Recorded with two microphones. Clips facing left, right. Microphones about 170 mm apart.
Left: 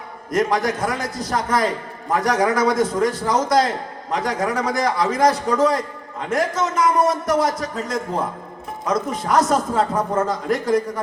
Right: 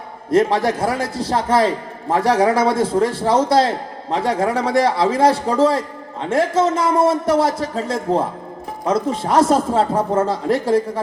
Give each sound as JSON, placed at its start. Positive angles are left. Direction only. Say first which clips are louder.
{"t": 0.3, "sound": "a man's voice", "louder": "right 4 dB", "side_deg": -30}